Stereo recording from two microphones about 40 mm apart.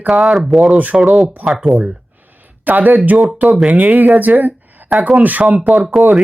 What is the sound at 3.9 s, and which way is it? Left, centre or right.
Speech, right.